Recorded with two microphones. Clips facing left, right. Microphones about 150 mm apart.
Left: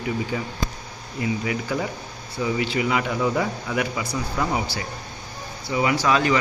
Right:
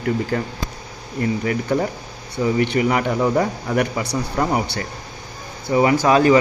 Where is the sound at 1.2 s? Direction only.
50° right (ahead or behind).